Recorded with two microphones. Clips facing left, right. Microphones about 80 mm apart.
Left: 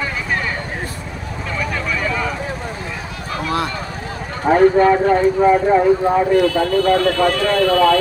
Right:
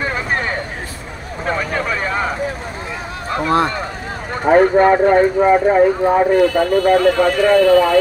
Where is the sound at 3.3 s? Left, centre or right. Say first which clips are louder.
Right 5 dB; right.